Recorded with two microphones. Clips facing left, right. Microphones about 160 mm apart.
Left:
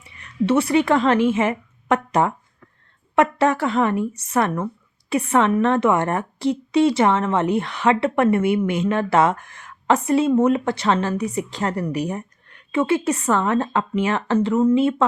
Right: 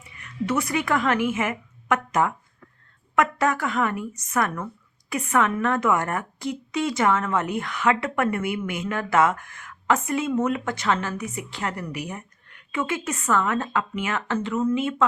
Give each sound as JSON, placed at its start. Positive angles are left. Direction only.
{"t": 0.0, "sound": "a woman's voice", "side_deg": 30}